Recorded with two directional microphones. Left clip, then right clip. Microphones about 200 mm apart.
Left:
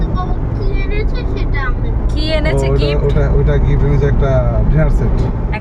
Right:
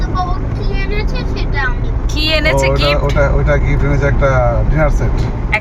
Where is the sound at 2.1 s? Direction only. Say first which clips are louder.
Right 4 dB; 10° left (ahead or behind).